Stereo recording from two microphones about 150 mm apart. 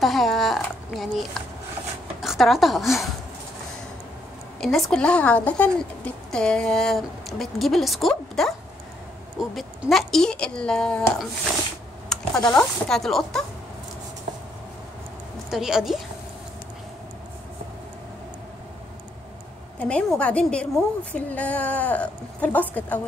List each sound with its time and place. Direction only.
0.0 s a sound: centre (ahead or behind)
2.2 s a woman's voice: centre (ahead or behind)
4.6 s speech: centre (ahead or behind)
12.1 s a sound: 5° left (ahead or behind)
12.5 s speech: 5° left (ahead or behind)
15.5 s speech: 5° right (ahead or behind)
19.8 s a woman's voice: 10° left (ahead or behind)